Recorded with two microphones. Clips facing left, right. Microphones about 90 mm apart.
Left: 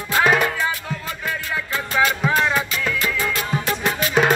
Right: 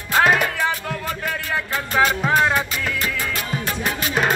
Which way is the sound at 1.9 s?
40° right (ahead or behind).